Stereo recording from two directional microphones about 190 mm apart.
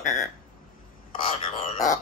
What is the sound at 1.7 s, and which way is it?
Speech, 40° left (ahead or behind).